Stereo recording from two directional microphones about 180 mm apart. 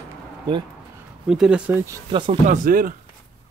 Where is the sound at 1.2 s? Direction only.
5° right (ahead or behind).